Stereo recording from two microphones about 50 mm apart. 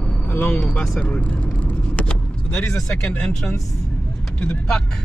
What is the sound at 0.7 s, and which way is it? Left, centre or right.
Vehicle, left.